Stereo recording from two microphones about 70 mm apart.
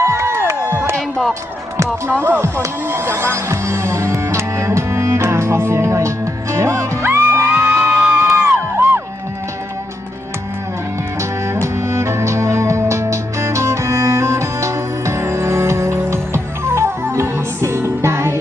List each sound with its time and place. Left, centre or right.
0.0 s a sound: right
2.0 s speech: right
4.1 s music: right
8.3 s music: right
11.6 s music: right